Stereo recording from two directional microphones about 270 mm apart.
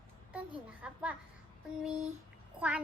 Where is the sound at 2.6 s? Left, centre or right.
Centre.